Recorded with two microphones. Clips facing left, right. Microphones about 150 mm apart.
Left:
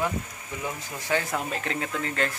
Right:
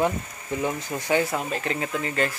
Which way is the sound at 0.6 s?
20° right (ahead or behind).